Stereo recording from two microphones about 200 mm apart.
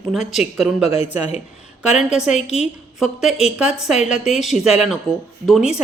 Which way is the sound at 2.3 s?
35° left (ahead or behind).